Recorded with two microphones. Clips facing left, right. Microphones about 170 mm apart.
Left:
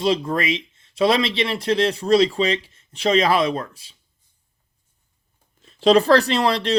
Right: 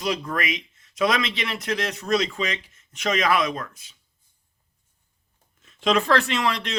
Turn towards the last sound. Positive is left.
turn(degrees=35)  # may be behind; listen again after turning